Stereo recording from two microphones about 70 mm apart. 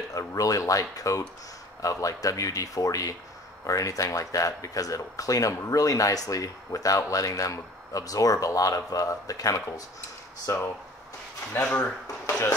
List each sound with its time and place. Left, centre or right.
0.1 s speech: left
10.5 s speech: left
11.6 s speech: centre